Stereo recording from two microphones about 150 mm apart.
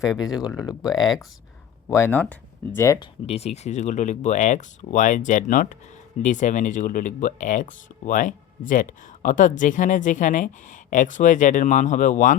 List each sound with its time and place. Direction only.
0.0 s speech: 5° right (ahead or behind)
1.9 s speech: 15° left (ahead or behind)
3.2 s speech: 45° left (ahead or behind)